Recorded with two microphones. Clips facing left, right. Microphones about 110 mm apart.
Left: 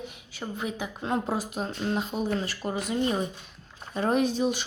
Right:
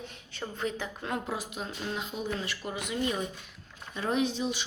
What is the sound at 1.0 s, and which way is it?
Speech, 30° left (ahead or behind).